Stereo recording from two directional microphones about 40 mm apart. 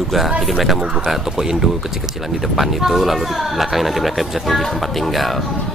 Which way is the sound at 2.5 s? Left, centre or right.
Centre.